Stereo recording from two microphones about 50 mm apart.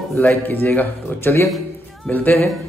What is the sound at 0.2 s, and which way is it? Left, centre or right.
A man's voice, left.